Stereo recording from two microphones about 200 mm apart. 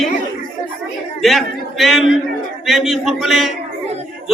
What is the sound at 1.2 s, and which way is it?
A man's voice, centre (ahead or behind).